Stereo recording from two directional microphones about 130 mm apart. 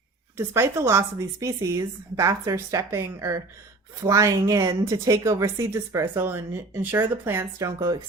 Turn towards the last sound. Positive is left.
turn(degrees=-25)  # may be behind; listen again after turning